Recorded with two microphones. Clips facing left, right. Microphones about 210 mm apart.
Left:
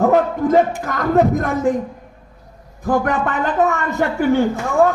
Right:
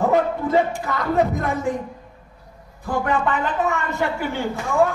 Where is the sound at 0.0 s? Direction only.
45° left (ahead or behind).